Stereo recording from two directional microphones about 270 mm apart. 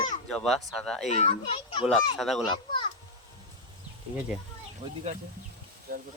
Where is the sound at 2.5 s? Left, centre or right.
Centre.